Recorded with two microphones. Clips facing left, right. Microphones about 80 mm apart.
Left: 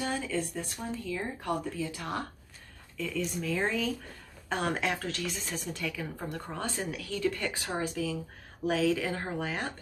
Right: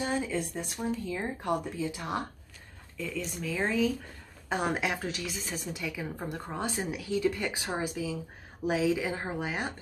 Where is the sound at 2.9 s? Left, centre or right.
Centre.